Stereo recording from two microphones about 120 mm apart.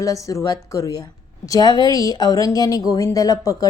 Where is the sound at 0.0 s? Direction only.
25° left (ahead or behind).